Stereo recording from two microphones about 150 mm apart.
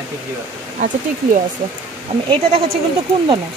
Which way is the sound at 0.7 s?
60° right (ahead or behind).